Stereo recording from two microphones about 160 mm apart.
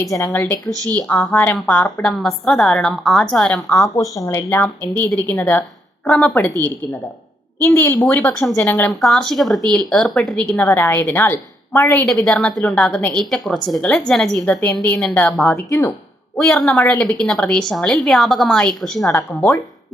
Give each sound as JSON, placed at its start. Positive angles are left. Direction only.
{"t": 0.0, "sound": "speech", "side_deg": 20}
{"t": 0.7, "sound": "speech", "side_deg": -25}
{"t": 0.9, "sound": "a woman's voice", "side_deg": 5}
{"t": 3.9, "sound": "a woman's voice", "side_deg": 20}
{"t": 6.4, "sound": "speech", "side_deg": 15}
{"t": 9.0, "sound": "a woman's voice", "side_deg": 0}
{"t": 10.7, "sound": "a woman's voice", "side_deg": 15}
{"t": 19.1, "sound": "speech", "side_deg": 15}